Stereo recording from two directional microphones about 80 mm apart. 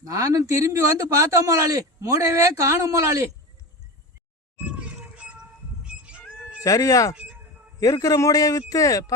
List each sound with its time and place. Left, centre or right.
0.0 s a man's voice: right
4.7 s a sound: centre
5.8 s cat: centre
6.6 s a man's voice: left